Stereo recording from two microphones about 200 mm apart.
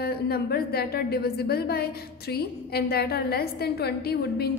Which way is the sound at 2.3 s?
50° left (ahead or behind).